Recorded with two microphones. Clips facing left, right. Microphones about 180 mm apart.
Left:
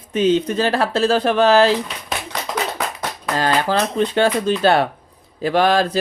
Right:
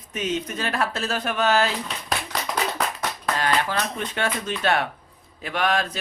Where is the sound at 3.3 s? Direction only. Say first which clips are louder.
Left 7 dB; 35° left (ahead or behind).